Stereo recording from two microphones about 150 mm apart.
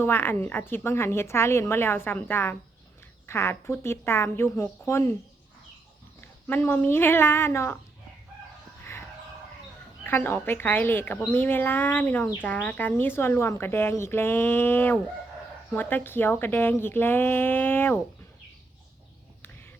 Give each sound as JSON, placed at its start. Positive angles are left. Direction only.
{"t": 0.0, "sound": "speech", "side_deg": 15}
{"t": 6.5, "sound": "speech", "side_deg": 15}
{"t": 10.0, "sound": "speech", "side_deg": 15}